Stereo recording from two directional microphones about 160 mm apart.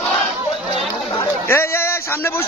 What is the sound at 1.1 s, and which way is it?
Chatter, 15° left (ahead or behind).